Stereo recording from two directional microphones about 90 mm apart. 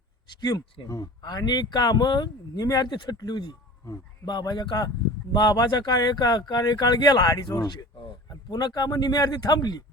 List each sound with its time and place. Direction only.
0.3 s speech: 50° left (ahead or behind)
0.9 s speech: 35° left (ahead or behind)
1.2 s speech: 50° left (ahead or behind)